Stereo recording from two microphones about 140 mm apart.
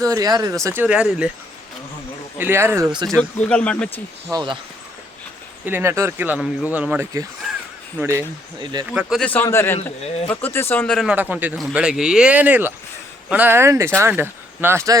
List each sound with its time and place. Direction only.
0.0 s speech: 25° right (ahead or behind); by 1.3 s 5° right (ahead or behind)
2.4 s speech: 15° right (ahead or behind)
3.2 s speech: 10° left (ahead or behind)
4.3 s speech: 30° right (ahead or behind)
5.6 s speech: 15° right (ahead or behind)
8.9 s speech: 5° right (ahead or behind)
9.2 s speech: 15° left (ahead or behind)
11.1 s speech: 10° right (ahead or behind)